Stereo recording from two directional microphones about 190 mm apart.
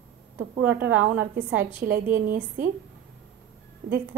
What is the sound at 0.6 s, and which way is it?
Speech, 10° right (ahead or behind).